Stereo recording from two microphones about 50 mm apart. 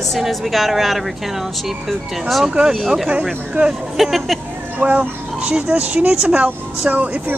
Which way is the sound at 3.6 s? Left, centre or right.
Right.